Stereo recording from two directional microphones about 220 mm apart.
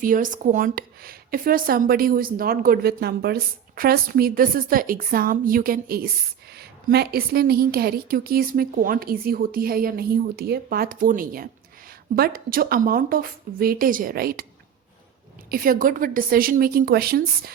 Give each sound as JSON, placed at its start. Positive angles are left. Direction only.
{"t": 0.0, "sound": "a woman's voice", "side_deg": -40}
{"t": 15.4, "sound": "speech", "side_deg": -40}